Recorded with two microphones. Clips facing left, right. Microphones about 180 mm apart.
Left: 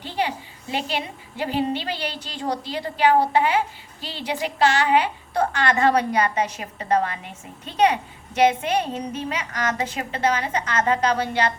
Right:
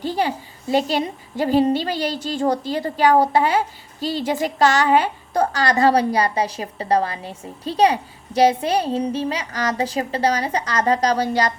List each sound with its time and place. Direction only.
0.0 s a woman's voice: 40° right (ahead or behind)